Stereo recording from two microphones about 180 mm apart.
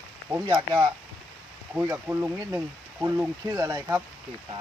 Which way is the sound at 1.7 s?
15° right (ahead or behind).